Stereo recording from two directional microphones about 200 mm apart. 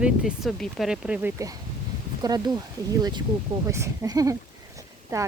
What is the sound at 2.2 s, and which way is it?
Speech, 20° right (ahead or behind).